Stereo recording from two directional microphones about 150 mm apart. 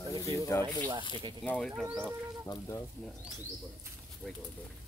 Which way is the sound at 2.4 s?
20° left (ahead or behind).